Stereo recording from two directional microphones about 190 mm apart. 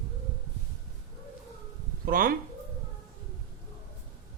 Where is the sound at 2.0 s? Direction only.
50° right (ahead or behind).